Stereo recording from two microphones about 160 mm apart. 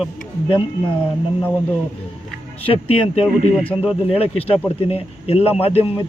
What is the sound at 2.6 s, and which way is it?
Speech, 35° left (ahead or behind).